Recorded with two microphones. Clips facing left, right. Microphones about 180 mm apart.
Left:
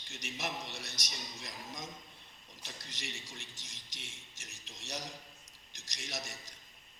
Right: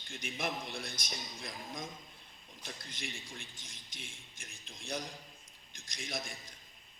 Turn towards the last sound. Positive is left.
turn(degrees=-55)  # may be behind; listen again after turning